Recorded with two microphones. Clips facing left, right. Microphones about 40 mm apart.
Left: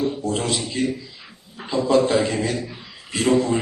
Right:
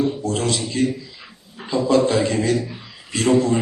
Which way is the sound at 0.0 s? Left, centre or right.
Centre.